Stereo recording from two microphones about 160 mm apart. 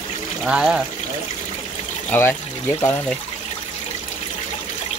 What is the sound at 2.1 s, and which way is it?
Speech, 10° left (ahead or behind).